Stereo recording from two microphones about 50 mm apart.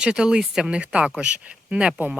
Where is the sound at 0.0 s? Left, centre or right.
Centre.